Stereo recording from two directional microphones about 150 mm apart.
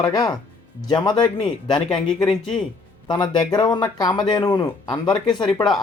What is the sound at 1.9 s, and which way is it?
Speech, 5° left (ahead or behind).